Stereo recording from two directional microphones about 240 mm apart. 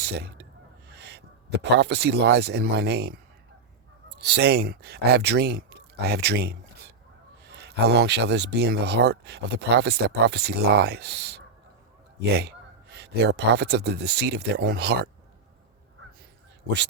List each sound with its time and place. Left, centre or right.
0.0 s a sound: right
0.9 s speech: right
4.2 s speech: right